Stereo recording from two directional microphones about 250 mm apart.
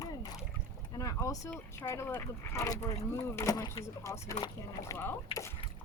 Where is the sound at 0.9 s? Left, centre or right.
Centre.